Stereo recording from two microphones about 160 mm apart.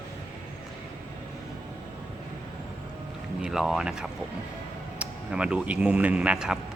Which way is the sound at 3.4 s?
5° right (ahead or behind).